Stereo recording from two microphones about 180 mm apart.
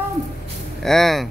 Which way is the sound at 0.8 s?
Centre (ahead or behind).